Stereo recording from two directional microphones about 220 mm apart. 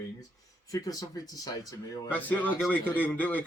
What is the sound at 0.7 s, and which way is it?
A man's voice, 15° left (ahead or behind).